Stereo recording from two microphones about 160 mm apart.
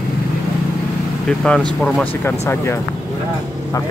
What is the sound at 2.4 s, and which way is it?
Speech, 15° left (ahead or behind).